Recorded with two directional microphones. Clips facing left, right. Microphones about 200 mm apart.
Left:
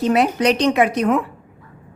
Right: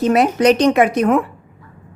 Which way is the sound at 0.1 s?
45° right (ahead or behind).